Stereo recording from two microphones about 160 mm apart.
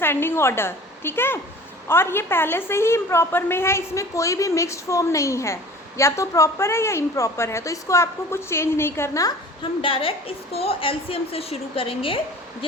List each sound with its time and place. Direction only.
0.0 s a woman's voice: 15° left (ahead or behind)
9.8 s a woman's voice: 35° left (ahead or behind)